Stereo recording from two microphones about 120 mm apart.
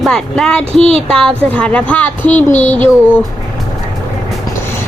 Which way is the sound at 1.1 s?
5° left (ahead or behind).